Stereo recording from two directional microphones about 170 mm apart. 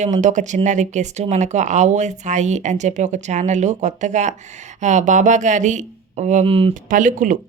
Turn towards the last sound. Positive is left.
turn(degrees=-50)  # may be behind; listen again after turning